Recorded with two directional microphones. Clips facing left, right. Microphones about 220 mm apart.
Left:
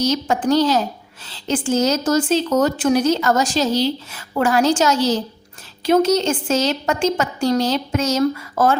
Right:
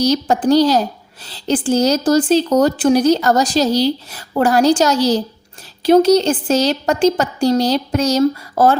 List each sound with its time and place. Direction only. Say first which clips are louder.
0.0 s a woman's voice: right 4 dB; 35° right (ahead or behind)